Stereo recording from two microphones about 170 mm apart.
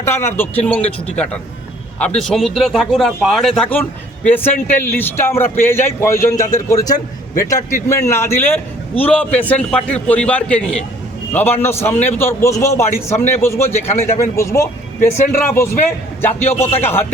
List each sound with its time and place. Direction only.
0.0 s a man's voice: 15° left (ahead or behind)